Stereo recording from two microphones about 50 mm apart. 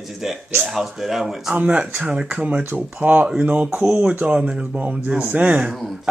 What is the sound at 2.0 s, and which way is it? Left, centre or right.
Speech, right.